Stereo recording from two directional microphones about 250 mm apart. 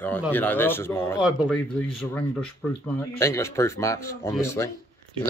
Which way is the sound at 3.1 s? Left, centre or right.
Centre.